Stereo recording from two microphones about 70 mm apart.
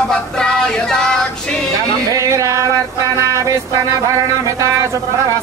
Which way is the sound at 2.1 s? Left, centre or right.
Right.